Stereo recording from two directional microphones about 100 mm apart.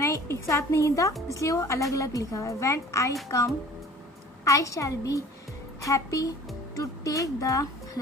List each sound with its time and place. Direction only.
0.0 s a woman's voice: 30° left (ahead or behind)